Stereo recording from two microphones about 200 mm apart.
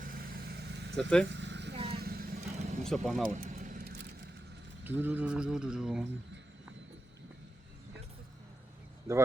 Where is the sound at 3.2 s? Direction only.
45° right (ahead or behind).